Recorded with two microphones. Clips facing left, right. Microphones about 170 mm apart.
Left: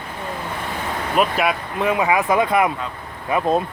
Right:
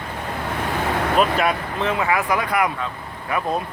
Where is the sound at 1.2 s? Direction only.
10° left (ahead or behind).